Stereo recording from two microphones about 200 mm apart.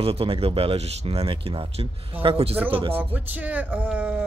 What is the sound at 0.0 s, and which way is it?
Speech, 30° right (ahead or behind).